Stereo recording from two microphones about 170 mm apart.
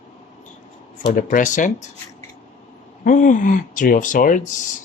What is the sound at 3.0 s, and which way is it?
Speech, 50° left (ahead or behind).